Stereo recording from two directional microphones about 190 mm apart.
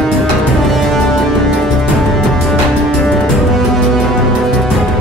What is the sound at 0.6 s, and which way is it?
Music, centre (ahead or behind).